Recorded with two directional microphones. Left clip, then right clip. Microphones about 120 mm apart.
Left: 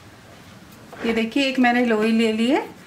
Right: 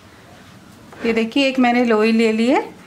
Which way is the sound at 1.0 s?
20° right (ahead or behind).